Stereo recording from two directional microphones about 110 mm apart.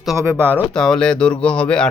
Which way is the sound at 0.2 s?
25° right (ahead or behind).